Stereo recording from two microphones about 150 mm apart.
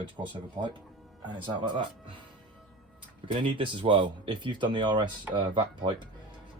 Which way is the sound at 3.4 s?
35° right (ahead or behind).